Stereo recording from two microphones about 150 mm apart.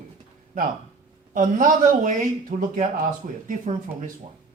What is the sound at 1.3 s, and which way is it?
Speech, 65° right (ahead or behind).